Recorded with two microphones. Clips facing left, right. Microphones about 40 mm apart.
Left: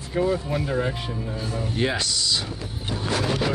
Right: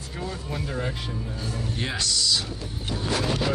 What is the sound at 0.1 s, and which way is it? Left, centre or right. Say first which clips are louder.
Speech: left 10 dB; centre.